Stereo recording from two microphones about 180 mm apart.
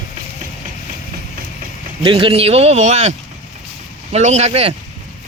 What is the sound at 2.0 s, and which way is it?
Speech, 30° right (ahead or behind).